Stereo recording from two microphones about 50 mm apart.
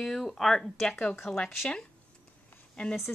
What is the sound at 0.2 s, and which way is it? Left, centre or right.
Speech, centre.